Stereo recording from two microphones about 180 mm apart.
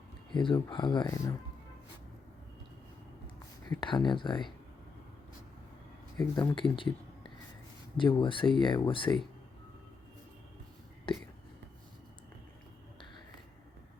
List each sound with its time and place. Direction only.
0.3 s speech: 25° left (ahead or behind)
3.7 s speech: 25° left (ahead or behind)
6.1 s speech: 20° left (ahead or behind)
7.9 s speech: 25° left (ahead or behind)